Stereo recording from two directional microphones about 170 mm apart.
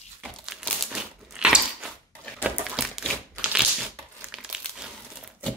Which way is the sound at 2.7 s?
Centre (ahead or behind).